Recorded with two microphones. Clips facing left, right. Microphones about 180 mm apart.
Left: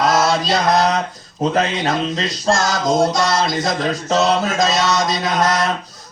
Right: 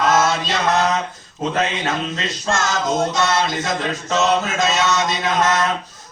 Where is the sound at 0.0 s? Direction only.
35° left (ahead or behind).